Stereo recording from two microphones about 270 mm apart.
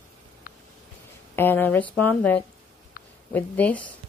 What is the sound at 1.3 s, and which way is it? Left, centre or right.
A woman's voice, centre.